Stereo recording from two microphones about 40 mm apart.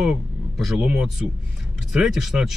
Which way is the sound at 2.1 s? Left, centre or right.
Centre.